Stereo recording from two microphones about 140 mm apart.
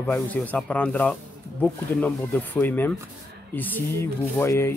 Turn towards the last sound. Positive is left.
turn(degrees=20)  # may be behind; listen again after turning